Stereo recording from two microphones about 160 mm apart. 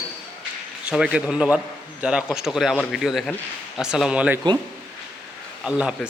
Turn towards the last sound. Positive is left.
turn(degrees=-5)  # may be behind; listen again after turning